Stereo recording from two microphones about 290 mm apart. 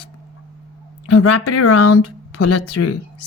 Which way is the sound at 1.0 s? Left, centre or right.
Left.